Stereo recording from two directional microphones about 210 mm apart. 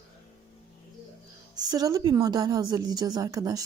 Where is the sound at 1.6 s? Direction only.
15° right (ahead or behind).